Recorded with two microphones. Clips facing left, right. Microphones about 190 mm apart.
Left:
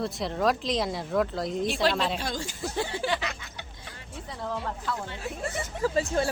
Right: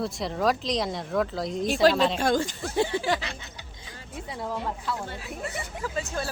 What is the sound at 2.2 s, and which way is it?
Speech, 55° right (ahead or behind).